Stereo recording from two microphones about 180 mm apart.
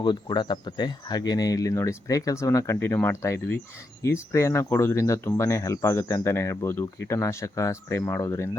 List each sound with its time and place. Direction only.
0.0 s speech: 25° left (ahead or behind)